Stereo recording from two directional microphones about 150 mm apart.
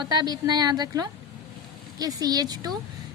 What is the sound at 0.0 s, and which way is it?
A woman's voice, 25° right (ahead or behind).